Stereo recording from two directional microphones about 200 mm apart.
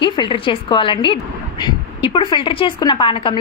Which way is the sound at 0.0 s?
25° left (ahead or behind).